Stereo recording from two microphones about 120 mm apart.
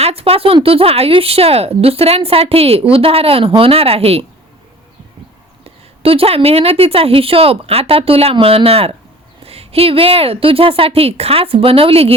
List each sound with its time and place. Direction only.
0.0 s speech: 55° right (ahead or behind)
5.6 s speech: 50° right (ahead or behind)